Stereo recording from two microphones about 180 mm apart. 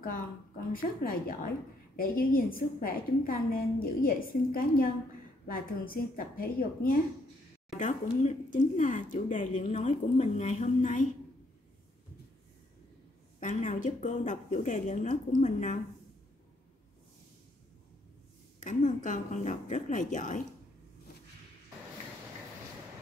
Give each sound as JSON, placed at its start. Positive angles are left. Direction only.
{"t": 0.7, "sound": "speech", "side_deg": 55}
{"t": 7.8, "sound": "speech", "side_deg": 40}
{"t": 13.4, "sound": "speech", "side_deg": 45}
{"t": 18.6, "sound": "speech", "side_deg": 45}